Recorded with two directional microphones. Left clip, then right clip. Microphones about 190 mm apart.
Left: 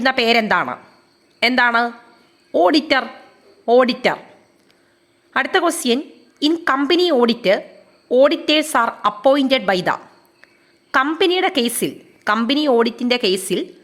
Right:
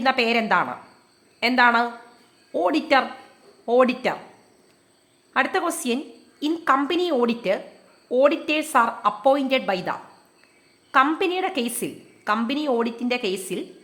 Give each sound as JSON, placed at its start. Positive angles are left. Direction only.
{"t": 0.0, "sound": "a woman's voice", "side_deg": 25}
{"t": 5.3, "sound": "a woman's voice", "side_deg": 25}